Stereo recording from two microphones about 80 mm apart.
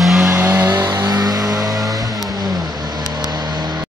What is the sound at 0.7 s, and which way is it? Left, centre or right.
Vehicle, right.